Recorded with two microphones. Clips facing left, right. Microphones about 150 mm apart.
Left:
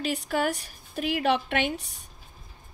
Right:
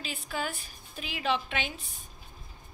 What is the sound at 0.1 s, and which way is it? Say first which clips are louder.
A woman's voice: left 7 dB; 70° left (ahead or behind).